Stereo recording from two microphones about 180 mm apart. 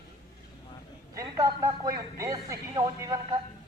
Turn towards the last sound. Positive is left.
turn(degrees=-20)  # may be behind; listen again after turning